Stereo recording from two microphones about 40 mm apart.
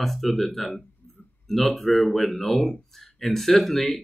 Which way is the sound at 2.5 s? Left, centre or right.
Centre.